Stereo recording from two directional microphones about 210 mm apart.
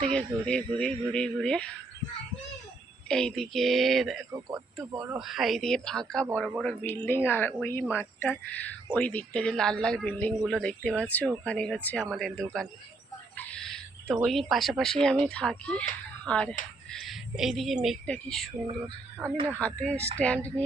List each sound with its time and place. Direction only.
0.0 s speech: 5° left (ahead or behind)
3.1 s speech: 5° left (ahead or behind)
4.3 s speech: 15° right (ahead or behind)
5.2 s a woman's voice: centre (ahead or behind)
13.3 s a sound: 5° left (ahead or behind)
14.3 s speech: centre (ahead or behind)
16.9 s a sound: centre (ahead or behind)
17.8 s speech: 5° left (ahead or behind)
19.5 s speech: 5° left (ahead or behind)